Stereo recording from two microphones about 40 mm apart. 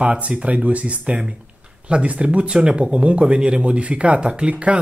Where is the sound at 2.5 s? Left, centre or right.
Right.